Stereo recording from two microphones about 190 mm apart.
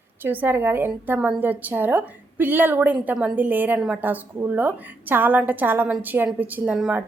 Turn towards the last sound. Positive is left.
turn(degrees=-5)  # may be behind; listen again after turning